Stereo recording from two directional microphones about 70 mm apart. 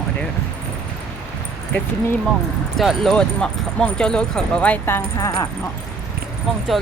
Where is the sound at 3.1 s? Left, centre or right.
Centre.